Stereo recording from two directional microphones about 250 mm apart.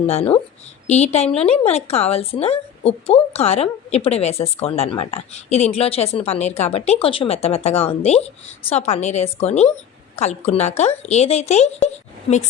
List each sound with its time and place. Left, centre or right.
0.1 s speech: left